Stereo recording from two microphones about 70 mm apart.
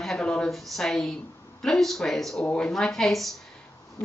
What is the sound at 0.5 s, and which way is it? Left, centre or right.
A woman's voice, centre.